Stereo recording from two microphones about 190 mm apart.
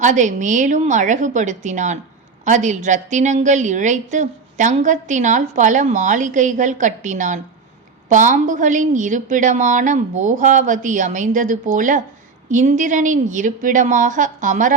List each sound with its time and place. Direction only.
0.0 s a woman's voice: 40° right (ahead or behind)